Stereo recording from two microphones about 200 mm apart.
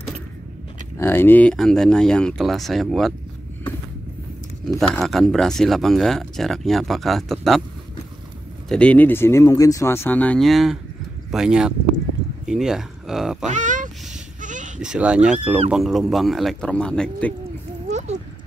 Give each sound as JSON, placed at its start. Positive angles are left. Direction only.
{"t": 0.9, "sound": "speech", "side_deg": 10}
{"t": 4.7, "sound": "speech", "side_deg": 0}
{"t": 8.6, "sound": "speech", "side_deg": 5}
{"t": 13.5, "sound": "speech", "side_deg": -40}
{"t": 14.4, "sound": "bleat", "side_deg": -40}
{"t": 14.8, "sound": "speech", "side_deg": -5}
{"t": 17.8, "sound": "a sound", "side_deg": -35}